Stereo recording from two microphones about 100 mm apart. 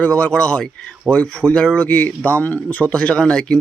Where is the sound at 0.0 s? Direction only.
15° left (ahead or behind).